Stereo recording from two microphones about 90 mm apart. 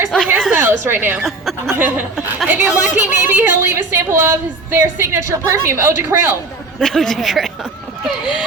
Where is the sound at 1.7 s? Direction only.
20° right (ahead or behind).